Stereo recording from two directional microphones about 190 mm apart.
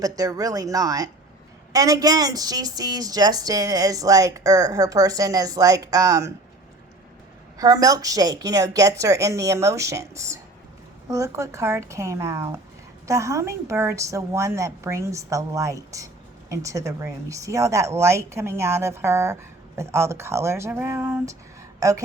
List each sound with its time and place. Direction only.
0.0 s a woman's voice: 20° right (ahead or behind)
7.6 s a woman's voice: 20° right (ahead or behind)